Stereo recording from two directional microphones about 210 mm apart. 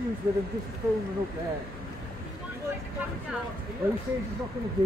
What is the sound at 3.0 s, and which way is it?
Vehicle, 10° right (ahead or behind).